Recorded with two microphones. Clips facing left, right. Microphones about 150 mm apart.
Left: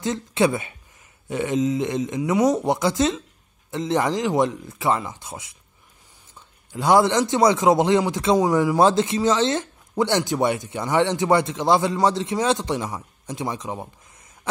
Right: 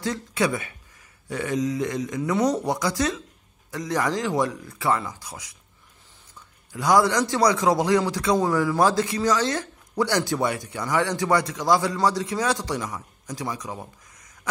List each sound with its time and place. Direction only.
0.0 s a man's voice: 25° left (ahead or behind)
6.7 s a man's voice: 25° left (ahead or behind)